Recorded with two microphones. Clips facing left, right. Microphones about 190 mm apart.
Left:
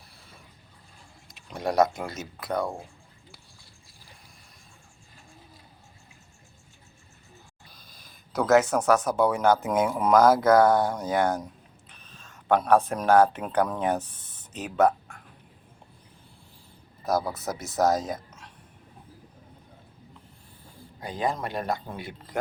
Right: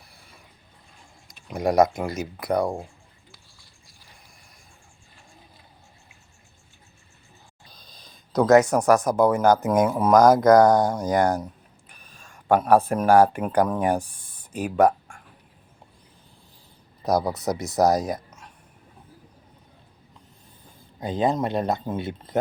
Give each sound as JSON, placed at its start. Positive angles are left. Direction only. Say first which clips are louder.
{"t": 1.5, "sound": "speech", "louder": "right 4 dB", "side_deg": -10}
{"t": 8.0, "sound": "speech", "louder": "right 6 dB", "side_deg": -15}
{"t": 17.1, "sound": "speech", "louder": "right 4 dB", "side_deg": -15}
{"t": 18.1, "sound": "a sound", "louder": "right 4 dB", "side_deg": -10}
{"t": 20.7, "sound": "speech", "louder": "right 7 dB", "side_deg": -20}